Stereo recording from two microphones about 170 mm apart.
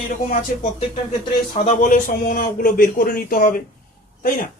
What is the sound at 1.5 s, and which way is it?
Speech, 45° left (ahead or behind).